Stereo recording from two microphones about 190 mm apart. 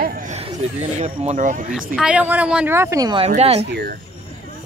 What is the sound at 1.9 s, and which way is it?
A woman's voice, 5° right (ahead or behind).